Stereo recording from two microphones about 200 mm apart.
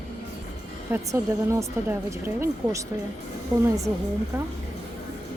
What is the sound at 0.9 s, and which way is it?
Speech, 15° right (ahead or behind).